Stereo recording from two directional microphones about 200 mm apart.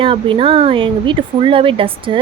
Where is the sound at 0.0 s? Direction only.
25° right (ahead or behind).